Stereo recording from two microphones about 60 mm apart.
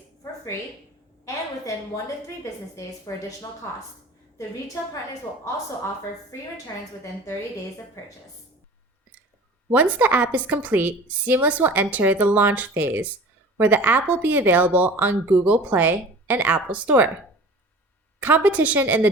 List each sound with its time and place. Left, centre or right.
1.2 s a woman's voice: left
9.6 s speech: right
12.7 s speech: right
13.6 s speech: right
18.2 s a woman's voice: right